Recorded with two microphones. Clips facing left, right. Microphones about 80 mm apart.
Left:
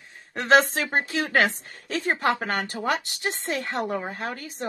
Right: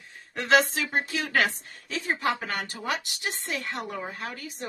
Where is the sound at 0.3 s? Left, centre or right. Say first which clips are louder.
Left 3 dB; left.